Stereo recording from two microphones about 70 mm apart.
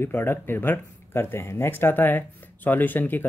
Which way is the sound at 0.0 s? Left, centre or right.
Left.